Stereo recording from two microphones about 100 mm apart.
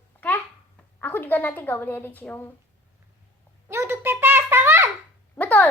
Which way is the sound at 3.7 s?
25° right (ahead or behind).